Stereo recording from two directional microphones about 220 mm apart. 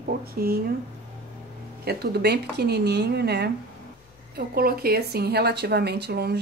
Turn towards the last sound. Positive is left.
turn(degrees=-50)  # may be behind; listen again after turning